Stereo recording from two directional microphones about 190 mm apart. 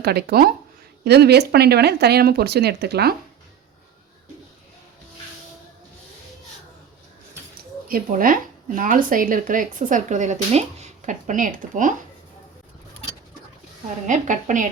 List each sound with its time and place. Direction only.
0.0 s speech: 55° right (ahead or behind)
7.9 s speech: 50° right (ahead or behind)
14.1 s speech: 40° right (ahead or behind)